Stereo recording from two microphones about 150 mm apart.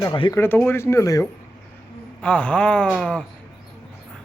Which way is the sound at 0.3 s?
15° left (ahead or behind).